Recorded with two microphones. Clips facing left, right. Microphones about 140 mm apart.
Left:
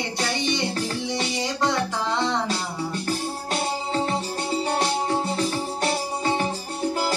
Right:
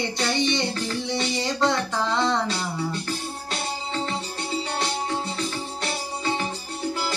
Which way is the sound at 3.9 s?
40° left (ahead or behind).